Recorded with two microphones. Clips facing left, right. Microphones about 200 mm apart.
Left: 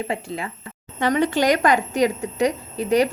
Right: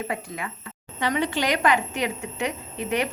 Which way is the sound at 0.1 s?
30° left (ahead or behind).